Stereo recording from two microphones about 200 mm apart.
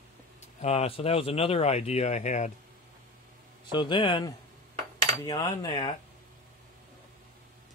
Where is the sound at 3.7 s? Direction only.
25° left (ahead or behind).